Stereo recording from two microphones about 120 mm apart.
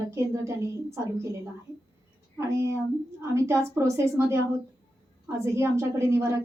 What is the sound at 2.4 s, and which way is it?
A woman's voice, 25° right (ahead or behind).